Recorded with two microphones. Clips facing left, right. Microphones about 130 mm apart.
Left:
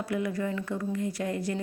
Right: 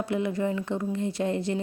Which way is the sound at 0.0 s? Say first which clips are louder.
Right 3 dB; 25° right (ahead or behind).